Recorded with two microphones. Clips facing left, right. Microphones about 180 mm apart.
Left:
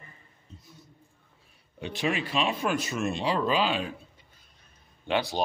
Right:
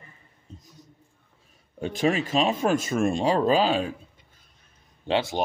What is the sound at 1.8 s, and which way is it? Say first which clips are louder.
Speech: right 5 dB; 45° right (ahead or behind).